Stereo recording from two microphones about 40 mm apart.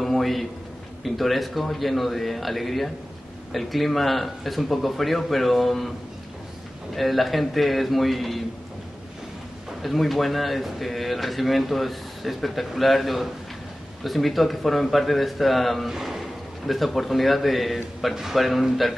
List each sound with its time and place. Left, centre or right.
0.0 s a sound: centre
1.0 s a man's voice: centre
7.0 s a man's voice: centre
9.8 s a man's voice: centre